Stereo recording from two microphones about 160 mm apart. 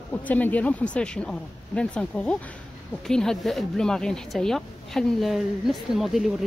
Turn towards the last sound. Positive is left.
turn(degrees=0)  # may be behind; listen again after turning